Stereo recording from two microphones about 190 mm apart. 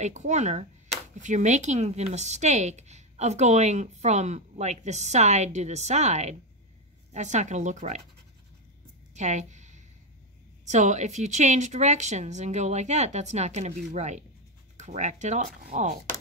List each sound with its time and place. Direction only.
0.0 s speech: 40° right (ahead or behind)
9.1 s music: 40° right (ahead or behind)
10.6 s speech: 40° right (ahead or behind)